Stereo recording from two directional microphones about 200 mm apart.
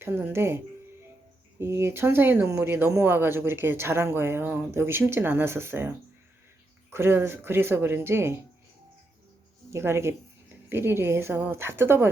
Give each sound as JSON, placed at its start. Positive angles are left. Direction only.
{"t": 0.0, "sound": "speech", "side_deg": -10}
{"t": 6.9, "sound": "speech", "side_deg": -10}
{"t": 9.6, "sound": "speech", "side_deg": -15}